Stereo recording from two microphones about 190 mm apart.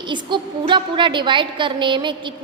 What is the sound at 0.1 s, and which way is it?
A woman's voice, 25° right (ahead or behind).